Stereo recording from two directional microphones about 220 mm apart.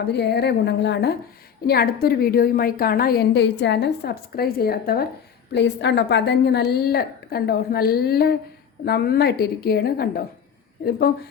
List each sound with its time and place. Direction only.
0.1 s a woman's voice: 50° left (ahead or behind)